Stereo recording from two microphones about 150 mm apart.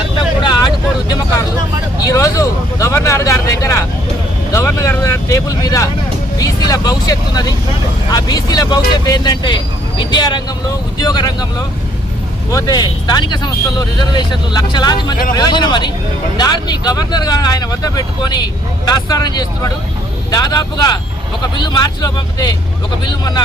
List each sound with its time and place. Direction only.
0.2 s vehicle: 30° left (ahead or behind)
2.0 s speech: 20° left (ahead or behind)
12.5 s speech: 25° left (ahead or behind)